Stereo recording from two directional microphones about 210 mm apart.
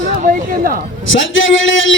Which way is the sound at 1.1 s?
65° left (ahead or behind).